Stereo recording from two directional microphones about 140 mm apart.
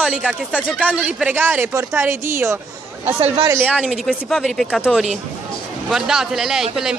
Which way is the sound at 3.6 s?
10° right (ahead or behind).